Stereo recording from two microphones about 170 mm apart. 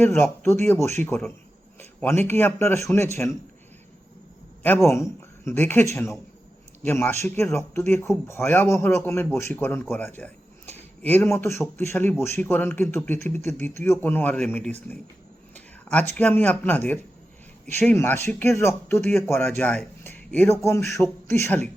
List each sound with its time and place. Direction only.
0.0 s speech: 10° left (ahead or behind)
4.6 s speech: 15° left (ahead or behind)